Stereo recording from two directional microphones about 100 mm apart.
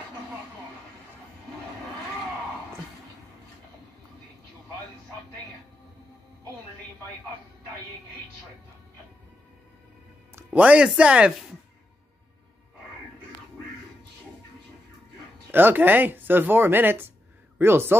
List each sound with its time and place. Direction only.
10.3 s speech: 15° right (ahead or behind)
15.5 s speech: 20° right (ahead or behind)